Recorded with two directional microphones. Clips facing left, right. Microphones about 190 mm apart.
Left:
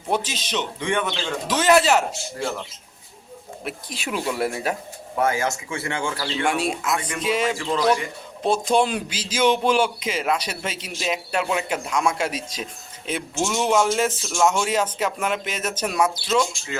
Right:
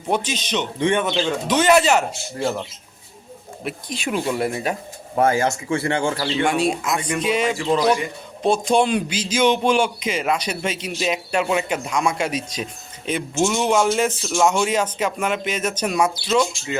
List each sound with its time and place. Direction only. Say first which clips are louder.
0.1 s speech: right 2 dB; 5° left (ahead or behind)
0.8 s speech: right 6 dB; 25° right (ahead or behind)
1.5 s speech: right 1 dB; 5° left (ahead or behind)
3.6 s speech: right 5 dB; 5° left (ahead or behind)
5.1 s speech: right 4 dB; 35° right (ahead or behind)
6.5 s speech: right 3 dB; 5° left (ahead or behind)
7.4 s speech: right 2 dB; 15° right (ahead or behind)
8.4 s speech: right 2 dB; 5° left (ahead or behind)
16.0 s speech: right 2 dB; 5° right (ahead or behind)